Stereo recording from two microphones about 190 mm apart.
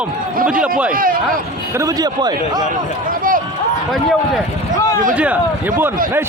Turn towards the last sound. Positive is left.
turn(degrees=-5)  # may be behind; listen again after turning